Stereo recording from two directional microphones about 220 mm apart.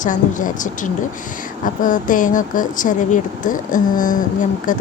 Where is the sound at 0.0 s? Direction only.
35° left (ahead or behind).